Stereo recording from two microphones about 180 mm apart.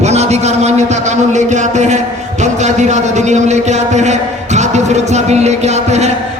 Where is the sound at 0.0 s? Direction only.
40° right (ahead or behind).